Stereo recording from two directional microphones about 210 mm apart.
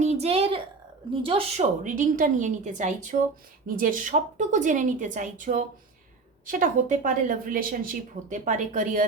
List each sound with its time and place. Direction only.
0.0 s a woman's voice: 30° right (ahead or behind)